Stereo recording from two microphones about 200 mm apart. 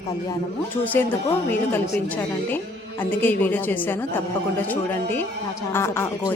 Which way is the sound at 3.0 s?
10° left (ahead or behind).